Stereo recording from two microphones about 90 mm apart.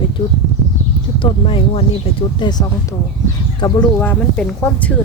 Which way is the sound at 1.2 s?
75° left (ahead or behind).